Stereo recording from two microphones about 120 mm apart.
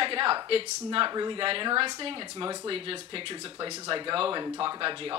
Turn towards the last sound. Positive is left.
turn(degrees=-45)  # may be behind; listen again after turning